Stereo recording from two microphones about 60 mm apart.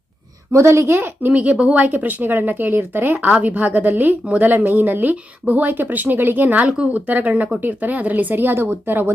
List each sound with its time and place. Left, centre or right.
0.5 s a woman's voice: right
1.3 s speech: right
6.7 s speech: centre; by 9.0 s right